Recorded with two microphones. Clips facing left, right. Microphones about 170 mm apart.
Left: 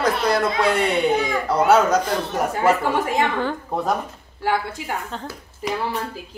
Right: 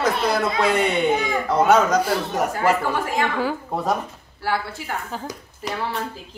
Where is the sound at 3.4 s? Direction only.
5° right (ahead or behind).